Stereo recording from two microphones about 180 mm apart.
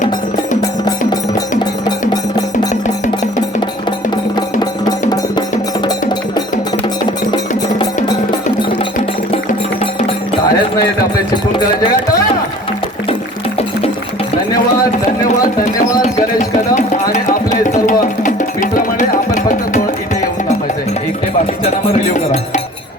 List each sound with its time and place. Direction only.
0.6 s music: 20° left (ahead or behind)
4.6 s music: 20° left (ahead or behind)
5.8 s wood block: 25° left (ahead or behind)
7.8 s music: 25° left (ahead or behind)
16.4 s music: 40° left (ahead or behind)
21.6 s speech: 40° left (ahead or behind)